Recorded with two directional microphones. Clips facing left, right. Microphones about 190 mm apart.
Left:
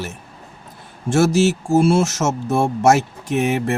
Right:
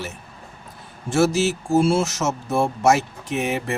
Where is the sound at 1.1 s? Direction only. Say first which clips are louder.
Left 3 dB; 45° left (ahead or behind).